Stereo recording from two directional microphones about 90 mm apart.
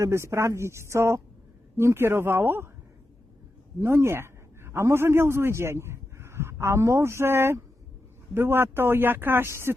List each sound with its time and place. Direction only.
0.0 s a woman's voice: 30° right (ahead or behind)
3.8 s a man's voice: 30° right (ahead or behind)